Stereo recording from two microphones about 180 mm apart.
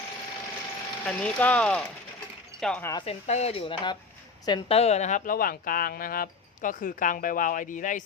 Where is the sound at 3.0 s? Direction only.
35° left (ahead or behind).